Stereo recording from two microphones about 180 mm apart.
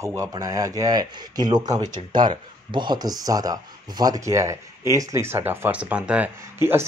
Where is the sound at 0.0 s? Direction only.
20° right (ahead or behind).